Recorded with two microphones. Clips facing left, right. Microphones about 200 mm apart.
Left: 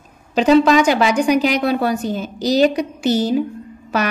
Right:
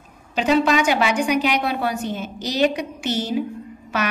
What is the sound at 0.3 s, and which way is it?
A woman's voice, 35° left (ahead or behind).